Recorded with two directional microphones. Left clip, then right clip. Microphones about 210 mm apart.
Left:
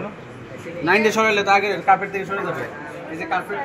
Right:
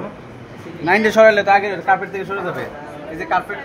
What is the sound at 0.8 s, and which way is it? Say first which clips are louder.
A man's voice: right 6 dB; 15° right (ahead or behind).